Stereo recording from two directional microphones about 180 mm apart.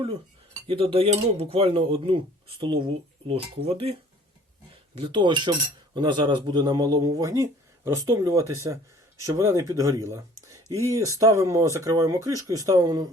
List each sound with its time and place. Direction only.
0.7 s speech: 30° right (ahead or behind)
4.9 s speech: 25° right (ahead or behind)